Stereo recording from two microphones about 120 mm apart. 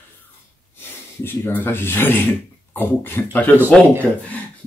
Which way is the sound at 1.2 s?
20° left (ahead or behind).